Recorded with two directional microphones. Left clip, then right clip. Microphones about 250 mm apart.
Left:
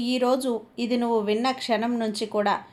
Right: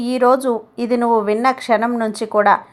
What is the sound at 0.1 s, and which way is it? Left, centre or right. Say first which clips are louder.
A woman's voice: right 10 dB; centre.